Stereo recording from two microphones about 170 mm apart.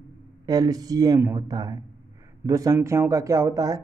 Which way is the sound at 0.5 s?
20° right (ahead or behind).